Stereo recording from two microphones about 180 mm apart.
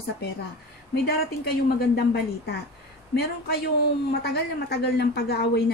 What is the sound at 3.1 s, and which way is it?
Speech, 65° left (ahead or behind).